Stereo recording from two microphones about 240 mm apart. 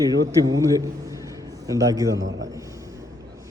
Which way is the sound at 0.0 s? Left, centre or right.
Centre.